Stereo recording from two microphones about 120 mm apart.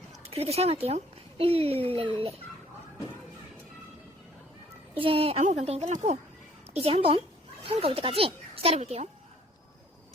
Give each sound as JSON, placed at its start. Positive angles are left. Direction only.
{"t": 0.3, "sound": "speech", "side_deg": -55}
{"t": 4.9, "sound": "a woman's voice", "side_deg": -50}
{"t": 5.4, "sound": "speech", "side_deg": -80}
{"t": 6.7, "sound": "a woman's voice", "side_deg": -55}